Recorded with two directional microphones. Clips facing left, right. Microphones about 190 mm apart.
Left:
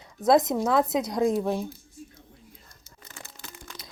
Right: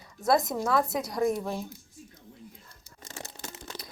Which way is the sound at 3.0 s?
25° right (ahead or behind).